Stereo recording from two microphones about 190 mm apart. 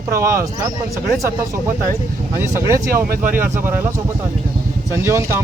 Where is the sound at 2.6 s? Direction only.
15° right (ahead or behind).